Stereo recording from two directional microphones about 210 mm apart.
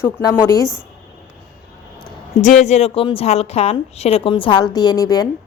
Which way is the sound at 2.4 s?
35° left (ahead or behind).